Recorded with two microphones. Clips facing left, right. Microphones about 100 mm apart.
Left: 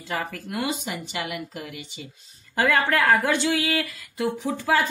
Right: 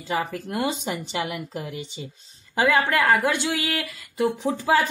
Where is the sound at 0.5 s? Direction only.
30° right (ahead or behind).